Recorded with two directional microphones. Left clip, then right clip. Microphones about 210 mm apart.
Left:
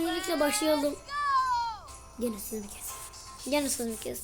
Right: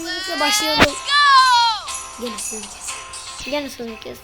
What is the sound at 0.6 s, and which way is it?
Music, 45° right (ahead or behind).